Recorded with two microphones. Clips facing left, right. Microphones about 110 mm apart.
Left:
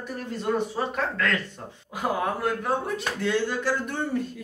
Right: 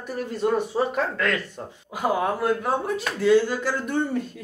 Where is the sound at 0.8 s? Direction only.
20° right (ahead or behind).